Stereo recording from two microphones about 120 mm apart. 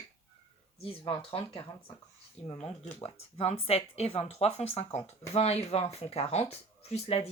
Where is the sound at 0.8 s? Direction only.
50° left (ahead or behind).